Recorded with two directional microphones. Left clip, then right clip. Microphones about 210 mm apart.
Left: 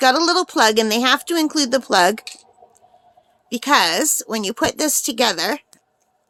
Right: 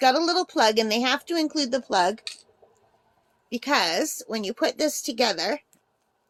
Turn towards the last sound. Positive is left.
turn(degrees=30)  # may be behind; listen again after turning